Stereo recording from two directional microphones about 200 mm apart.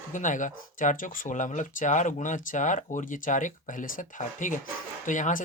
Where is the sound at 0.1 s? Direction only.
40° left (ahead or behind).